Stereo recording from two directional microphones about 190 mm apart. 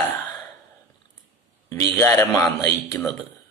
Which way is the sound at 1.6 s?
15° left (ahead or behind).